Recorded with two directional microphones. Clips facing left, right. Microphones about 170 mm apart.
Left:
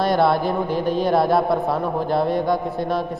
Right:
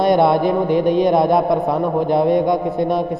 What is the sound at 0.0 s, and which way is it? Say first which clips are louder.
A man's voice: right 4 dB; 20° right (ahead or behind).